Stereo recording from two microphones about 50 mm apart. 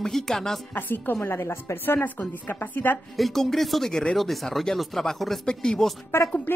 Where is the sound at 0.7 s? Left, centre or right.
Left.